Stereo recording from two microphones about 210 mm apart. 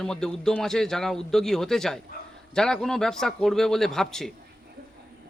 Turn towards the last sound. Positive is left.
turn(degrees=0)  # may be behind; listen again after turning